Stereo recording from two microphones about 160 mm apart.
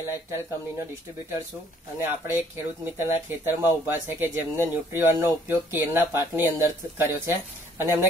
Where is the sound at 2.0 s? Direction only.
15° right (ahead or behind).